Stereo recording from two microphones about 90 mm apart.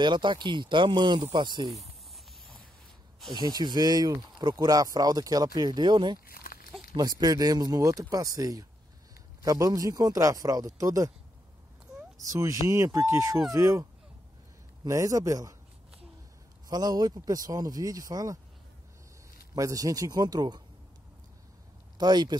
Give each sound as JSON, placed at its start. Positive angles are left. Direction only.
{"t": 0.0, "sound": "speech", "side_deg": -60}
{"t": 3.3, "sound": "speech", "side_deg": -50}
{"t": 6.9, "sound": "speech", "side_deg": -45}
{"t": 12.2, "sound": "speech", "side_deg": -35}
{"t": 14.9, "sound": "speech", "side_deg": -40}
{"t": 16.6, "sound": "speech", "side_deg": -45}
{"t": 19.5, "sound": "speech", "side_deg": -40}
{"t": 21.9, "sound": "speech", "side_deg": -50}